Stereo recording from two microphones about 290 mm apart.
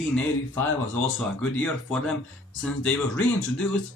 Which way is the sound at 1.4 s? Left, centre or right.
Centre.